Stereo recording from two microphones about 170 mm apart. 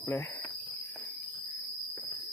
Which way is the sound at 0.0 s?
15° left (ahead or behind).